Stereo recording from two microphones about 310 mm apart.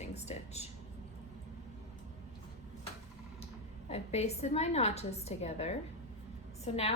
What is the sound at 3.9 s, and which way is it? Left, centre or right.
A woman's voice, left.